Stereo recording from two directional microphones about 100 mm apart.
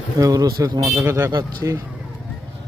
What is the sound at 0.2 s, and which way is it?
A man's voice, 35° right (ahead or behind).